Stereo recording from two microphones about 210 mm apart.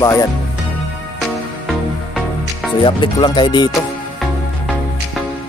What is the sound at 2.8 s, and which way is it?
Music, 25° left (ahead or behind).